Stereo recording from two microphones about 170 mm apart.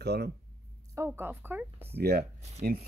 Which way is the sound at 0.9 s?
10° right (ahead or behind).